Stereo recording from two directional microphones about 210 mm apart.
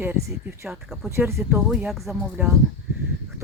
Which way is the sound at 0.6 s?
Centre (ahead or behind).